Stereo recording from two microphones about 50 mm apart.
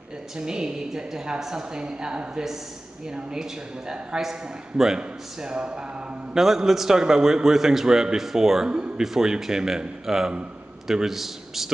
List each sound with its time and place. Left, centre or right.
0.4 s a man's voice: centre
6.3 s a man's voice: centre
8.6 s a sound: centre
9.0 s a man's voice: centre